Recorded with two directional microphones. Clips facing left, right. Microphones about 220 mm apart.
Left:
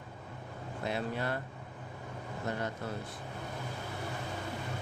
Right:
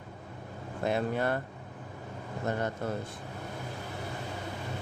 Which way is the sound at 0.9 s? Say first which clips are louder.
Right 6 dB; 50° right (ahead or behind).